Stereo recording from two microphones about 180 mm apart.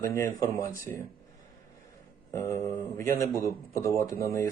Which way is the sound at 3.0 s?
15° left (ahead or behind).